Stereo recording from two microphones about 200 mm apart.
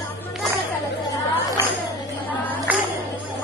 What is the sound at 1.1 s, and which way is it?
Chatter, 15° left (ahead or behind).